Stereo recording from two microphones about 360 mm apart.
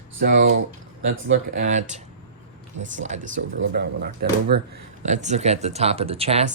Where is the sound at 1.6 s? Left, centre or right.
Centre.